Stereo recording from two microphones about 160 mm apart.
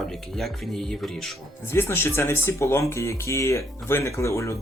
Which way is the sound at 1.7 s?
15° left (ahead or behind).